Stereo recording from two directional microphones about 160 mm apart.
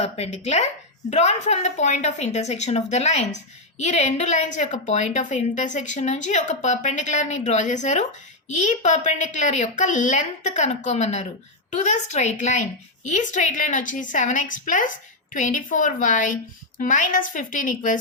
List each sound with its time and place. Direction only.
0.0 s a woman's voice: 40° left (ahead or behind)